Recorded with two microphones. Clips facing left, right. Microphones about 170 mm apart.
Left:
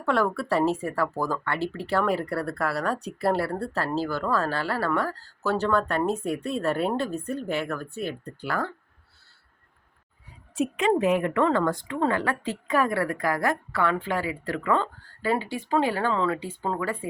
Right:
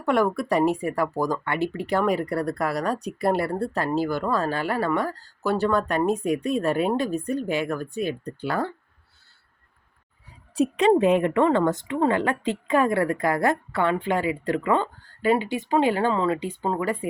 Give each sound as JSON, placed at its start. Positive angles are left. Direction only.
{"t": 0.0, "sound": "speech", "side_deg": -15}
{"t": 10.5, "sound": "a woman's voice", "side_deg": -35}